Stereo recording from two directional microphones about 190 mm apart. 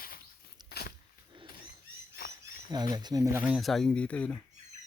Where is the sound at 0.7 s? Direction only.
55° left (ahead or behind).